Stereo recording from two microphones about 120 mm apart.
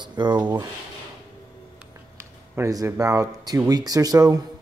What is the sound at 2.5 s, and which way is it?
Speech, 25° right (ahead or behind).